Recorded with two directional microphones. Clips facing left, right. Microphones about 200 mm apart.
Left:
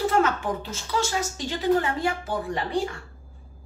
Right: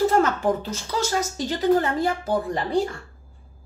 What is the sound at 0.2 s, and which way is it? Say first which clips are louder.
A woman's voice: right 3 dB; 40° right (ahead or behind).